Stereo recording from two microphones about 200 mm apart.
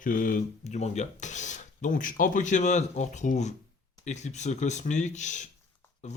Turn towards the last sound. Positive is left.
turn(degrees=35)  # may be behind; listen again after turning